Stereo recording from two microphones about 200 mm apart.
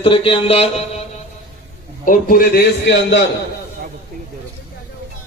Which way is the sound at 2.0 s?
45° left (ahead or behind).